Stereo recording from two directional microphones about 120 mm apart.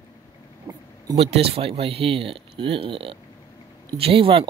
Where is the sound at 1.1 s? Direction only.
55° right (ahead or behind).